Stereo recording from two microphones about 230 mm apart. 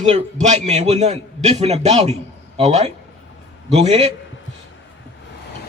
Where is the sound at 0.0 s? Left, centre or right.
Right.